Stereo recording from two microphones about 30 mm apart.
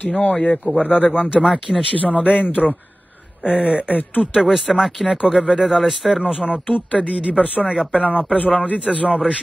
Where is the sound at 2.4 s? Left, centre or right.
Left.